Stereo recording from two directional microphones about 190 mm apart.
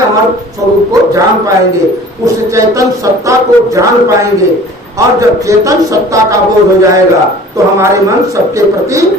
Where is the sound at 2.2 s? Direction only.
15° right (ahead or behind).